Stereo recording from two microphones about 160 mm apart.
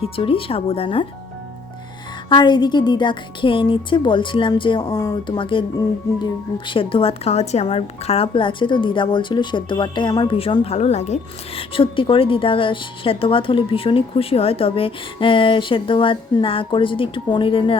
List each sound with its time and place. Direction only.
0.0 s a woman's voice: 35° left (ahead or behind)
2.3 s a woman's voice: 30° left (ahead or behind)